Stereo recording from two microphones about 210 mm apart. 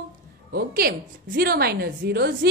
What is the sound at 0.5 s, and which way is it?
A woman's voice, 45° right (ahead or behind).